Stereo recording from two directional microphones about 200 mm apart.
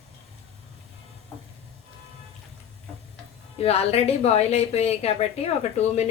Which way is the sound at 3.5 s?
30° left (ahead or behind).